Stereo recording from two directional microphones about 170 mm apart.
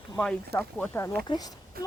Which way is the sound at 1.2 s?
25° left (ahead or behind).